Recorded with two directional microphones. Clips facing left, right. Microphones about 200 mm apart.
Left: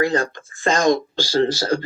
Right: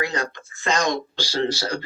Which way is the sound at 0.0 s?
50° left (ahead or behind).